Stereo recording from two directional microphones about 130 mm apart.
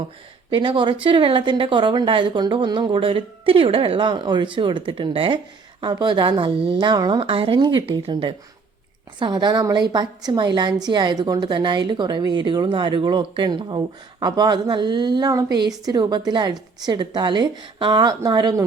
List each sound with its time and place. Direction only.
0.5 s a woman's voice: 40° right (ahead or behind)